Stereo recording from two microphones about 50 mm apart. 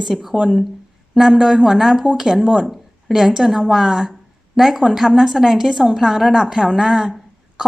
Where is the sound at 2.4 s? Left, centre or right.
Right.